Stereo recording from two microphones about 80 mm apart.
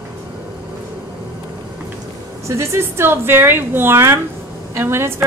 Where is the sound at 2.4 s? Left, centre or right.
Right.